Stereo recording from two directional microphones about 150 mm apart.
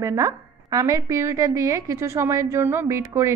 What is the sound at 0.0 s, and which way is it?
A woman's voice, 20° right (ahead or behind).